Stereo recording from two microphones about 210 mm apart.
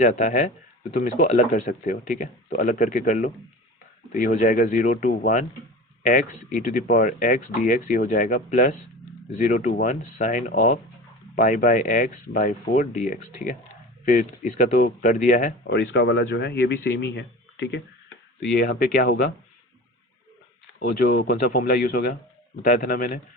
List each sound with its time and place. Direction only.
0.0 s speech: 40° left (ahead or behind)
15.6 s a man's voice: 55° left (ahead or behind)
20.7 s speech: 45° left (ahead or behind)